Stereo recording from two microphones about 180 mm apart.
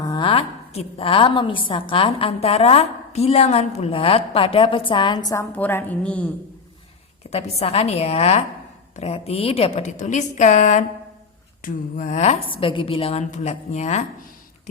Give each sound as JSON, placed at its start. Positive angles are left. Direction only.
{"t": 0.0, "sound": "a woman's voice", "side_deg": 25}
{"t": 7.3, "sound": "a woman's voice", "side_deg": 35}